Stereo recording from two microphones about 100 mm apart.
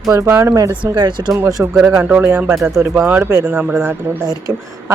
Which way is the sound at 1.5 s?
35° right (ahead or behind).